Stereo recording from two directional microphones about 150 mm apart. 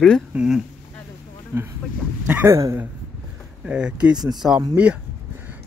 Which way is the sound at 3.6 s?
5° right (ahead or behind).